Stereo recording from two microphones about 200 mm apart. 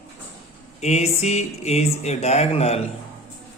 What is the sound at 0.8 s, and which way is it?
Speech, 35° left (ahead or behind).